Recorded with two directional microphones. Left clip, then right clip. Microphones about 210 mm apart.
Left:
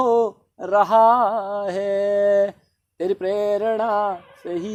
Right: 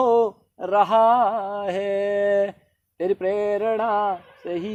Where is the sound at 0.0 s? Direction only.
30° right (ahead or behind).